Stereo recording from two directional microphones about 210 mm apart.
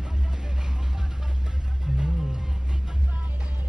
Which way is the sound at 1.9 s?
Centre (ahead or behind).